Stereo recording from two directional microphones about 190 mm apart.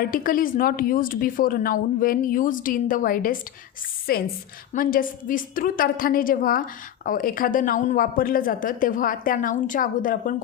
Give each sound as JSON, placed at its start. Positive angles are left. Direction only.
{"t": 0.0, "sound": "a woman's voice", "side_deg": 50}